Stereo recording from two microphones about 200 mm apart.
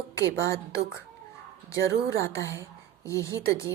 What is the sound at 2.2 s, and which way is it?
A woman's voice, 15° left (ahead or behind).